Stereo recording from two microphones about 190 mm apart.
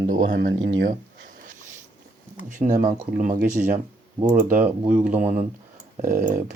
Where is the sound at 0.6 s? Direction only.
70° right (ahead or behind).